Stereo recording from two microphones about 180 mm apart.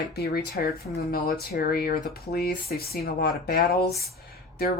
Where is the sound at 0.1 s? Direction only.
60° left (ahead or behind).